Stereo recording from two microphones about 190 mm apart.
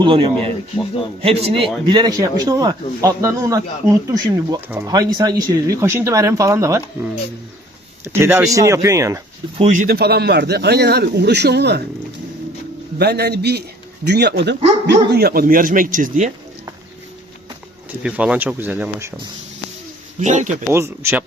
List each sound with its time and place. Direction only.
0.0 s speech: 30° right (ahead or behind)
9.6 s speech: 40° right (ahead or behind); by 11.8 s 60° right (ahead or behind)
13.0 s speech: 60° right (ahead or behind); by 16.3 s 40° right (ahead or behind)
18.0 s speech: 5° right (ahead or behind)
20.1 s a man's voice: 40° right (ahead or behind)
20.7 s speech: 15° right (ahead or behind)